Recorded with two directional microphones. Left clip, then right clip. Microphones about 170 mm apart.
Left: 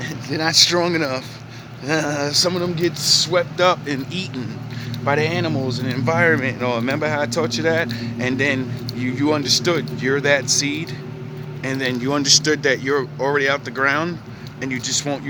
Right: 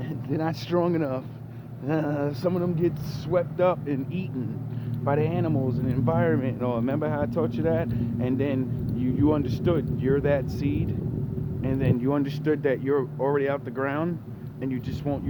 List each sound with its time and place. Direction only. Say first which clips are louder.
0.3 s speech: left 13 dB; 5° left (ahead or behind)
2.0 s a sound: left 5 dB; 20° left (ahead or behind)
2.2 s speech: left 8 dB; 5° left (ahead or behind)
5.0 s speech: left 6 dB; 15° left (ahead or behind)